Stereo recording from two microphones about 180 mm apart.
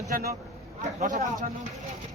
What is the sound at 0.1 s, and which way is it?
Speech, 55° right (ahead or behind).